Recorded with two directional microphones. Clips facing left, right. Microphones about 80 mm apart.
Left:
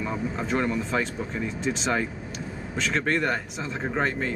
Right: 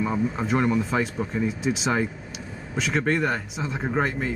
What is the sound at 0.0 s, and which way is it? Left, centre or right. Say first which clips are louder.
Speech: right 4 dB; centre.